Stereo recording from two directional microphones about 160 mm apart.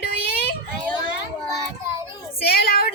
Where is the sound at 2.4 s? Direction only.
70° left (ahead or behind).